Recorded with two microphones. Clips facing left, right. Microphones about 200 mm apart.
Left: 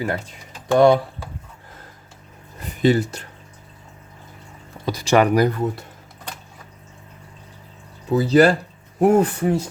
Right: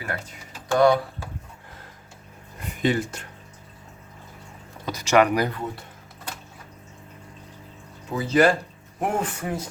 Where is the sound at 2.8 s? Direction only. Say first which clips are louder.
Left 6 dB; 35° left (ahead or behind).